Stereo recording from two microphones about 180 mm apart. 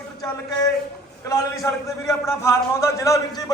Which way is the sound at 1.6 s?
15° left (ahead or behind).